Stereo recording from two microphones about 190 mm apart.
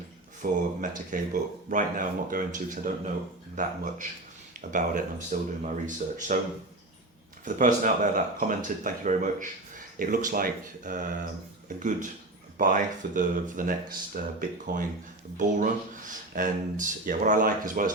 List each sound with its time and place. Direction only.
0.4 s speech: 50° right (ahead or behind)
7.4 s speech: 45° right (ahead or behind)
14.7 s speech: 60° right (ahead or behind)
15.4 s speech: 45° right (ahead or behind)